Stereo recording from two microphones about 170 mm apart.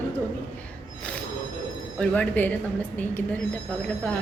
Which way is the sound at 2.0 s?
10° left (ahead or behind).